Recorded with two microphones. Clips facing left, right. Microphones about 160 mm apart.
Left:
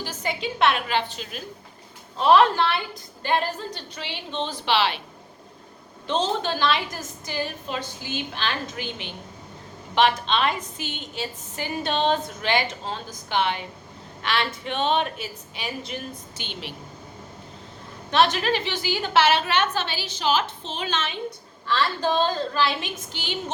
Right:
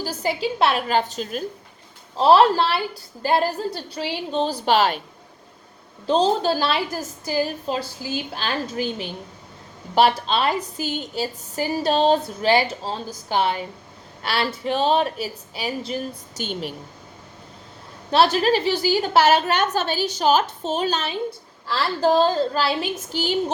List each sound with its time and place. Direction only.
0.0 s a woman's voice: 35° right (ahead or behind)
6.1 s a woman's voice: 40° right (ahead or behind)
18.1 s a woman's voice: 35° right (ahead or behind)